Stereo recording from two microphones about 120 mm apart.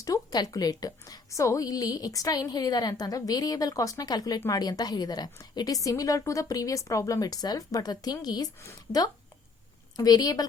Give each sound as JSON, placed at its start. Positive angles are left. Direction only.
{"t": 0.0, "sound": "a woman's voice", "side_deg": 30}